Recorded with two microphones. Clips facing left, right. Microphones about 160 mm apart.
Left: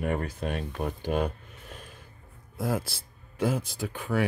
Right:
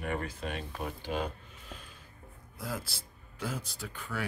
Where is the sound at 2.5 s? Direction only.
50° left (ahead or behind).